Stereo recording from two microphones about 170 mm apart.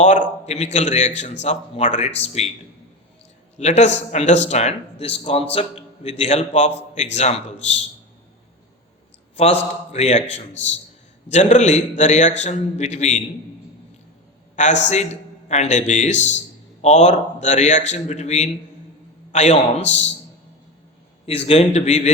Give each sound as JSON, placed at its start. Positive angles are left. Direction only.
{"t": 0.0, "sound": "a man's voice", "side_deg": 45}
{"t": 3.6, "sound": "a man's voice", "side_deg": 45}
{"t": 9.3, "sound": "a man's voice", "side_deg": 35}
{"t": 14.5, "sound": "a man's voice", "side_deg": 45}
{"t": 21.2, "sound": "a man's voice", "side_deg": 35}